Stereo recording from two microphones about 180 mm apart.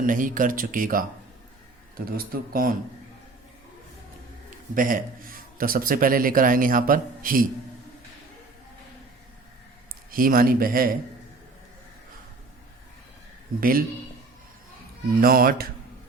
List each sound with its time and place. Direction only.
0.0 s a man's voice: 50° right (ahead or behind)
4.7 s a man's voice: 50° right (ahead or behind)
10.1 s a man's voice: 50° right (ahead or behind)
13.6 s a man's voice: 55° right (ahead or behind)
15.2 s a man's voice: 55° right (ahead or behind)